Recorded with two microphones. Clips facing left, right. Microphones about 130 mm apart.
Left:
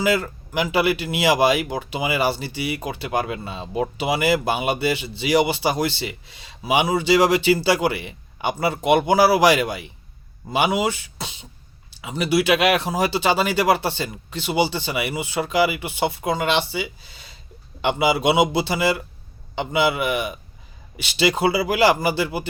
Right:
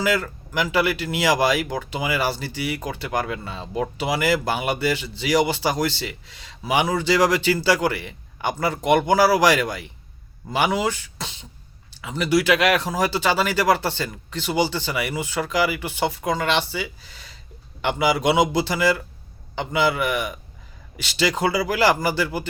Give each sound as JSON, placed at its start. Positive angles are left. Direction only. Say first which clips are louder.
{"t": 0.0, "sound": "speech", "louder": "left 2 dB", "side_deg": 20}